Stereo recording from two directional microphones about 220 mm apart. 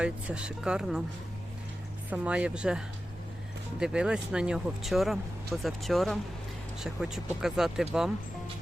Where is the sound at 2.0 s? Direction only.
5° right (ahead or behind).